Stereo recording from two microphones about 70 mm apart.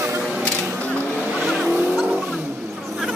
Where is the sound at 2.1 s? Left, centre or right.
Centre.